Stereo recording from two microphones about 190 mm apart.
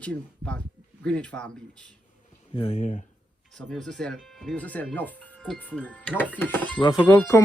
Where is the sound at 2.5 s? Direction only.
30° left (ahead or behind).